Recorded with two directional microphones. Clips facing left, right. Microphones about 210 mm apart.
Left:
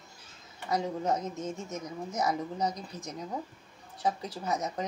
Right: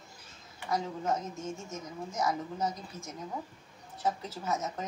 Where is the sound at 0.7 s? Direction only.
15° left (ahead or behind).